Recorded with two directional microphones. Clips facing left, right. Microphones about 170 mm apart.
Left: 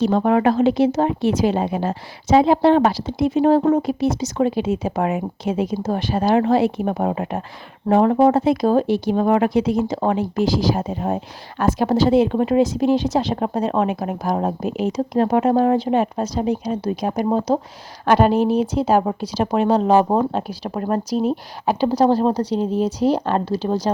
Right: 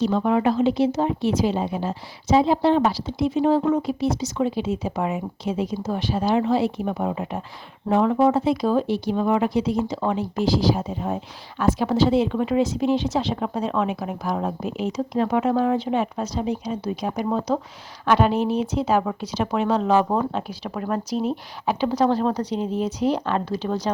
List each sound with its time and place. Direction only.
0.3 s speech: 65° left (ahead or behind)
5.8 s speech: 50° left (ahead or behind); by 23.9 s 35° left (ahead or behind)